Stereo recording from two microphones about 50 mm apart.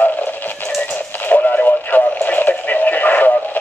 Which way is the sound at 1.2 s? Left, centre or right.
Left.